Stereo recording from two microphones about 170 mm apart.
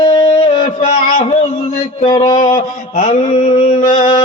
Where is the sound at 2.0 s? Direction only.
25° left (ahead or behind).